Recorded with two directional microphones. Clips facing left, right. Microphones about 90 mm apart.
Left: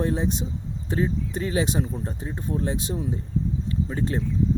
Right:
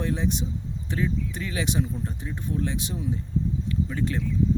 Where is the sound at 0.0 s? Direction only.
30° left (ahead or behind).